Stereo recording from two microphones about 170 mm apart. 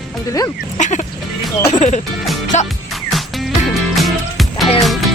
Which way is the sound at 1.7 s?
45° left (ahead or behind).